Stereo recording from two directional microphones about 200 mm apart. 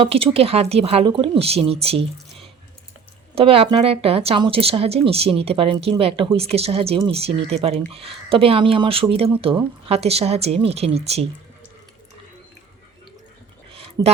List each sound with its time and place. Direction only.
0.0 s a woman's voice: 30° right (ahead or behind)
3.3 s a woman's voice: 30° right (ahead or behind)